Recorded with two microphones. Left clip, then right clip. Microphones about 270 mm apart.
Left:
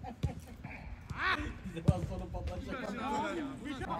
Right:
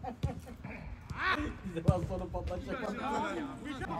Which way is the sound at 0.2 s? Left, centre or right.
Centre.